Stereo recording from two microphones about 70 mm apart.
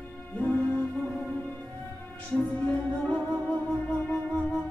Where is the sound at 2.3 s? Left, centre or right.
Left.